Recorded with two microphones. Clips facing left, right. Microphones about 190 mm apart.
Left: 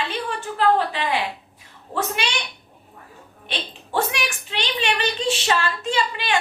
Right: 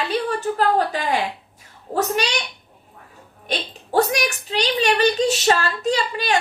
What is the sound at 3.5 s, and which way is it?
A woman's voice, 40° right (ahead or behind).